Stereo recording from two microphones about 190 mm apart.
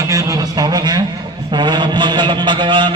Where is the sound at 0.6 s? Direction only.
20° right (ahead or behind).